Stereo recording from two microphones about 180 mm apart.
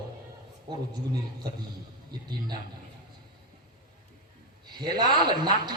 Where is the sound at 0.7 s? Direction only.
25° right (ahead or behind).